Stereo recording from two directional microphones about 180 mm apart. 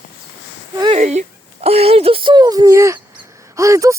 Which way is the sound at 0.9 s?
40° right (ahead or behind).